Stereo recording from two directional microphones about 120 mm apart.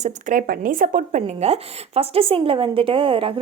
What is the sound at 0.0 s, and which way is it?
Speech, 90° right.